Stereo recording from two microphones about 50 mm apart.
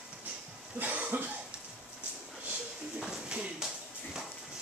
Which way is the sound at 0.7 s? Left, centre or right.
Right.